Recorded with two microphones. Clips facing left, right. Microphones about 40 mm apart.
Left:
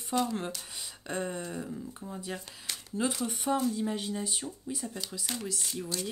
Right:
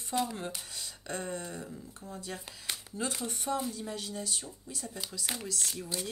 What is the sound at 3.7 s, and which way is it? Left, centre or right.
Speech, left.